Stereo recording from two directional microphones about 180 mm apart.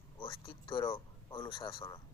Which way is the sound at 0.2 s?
25° left (ahead or behind).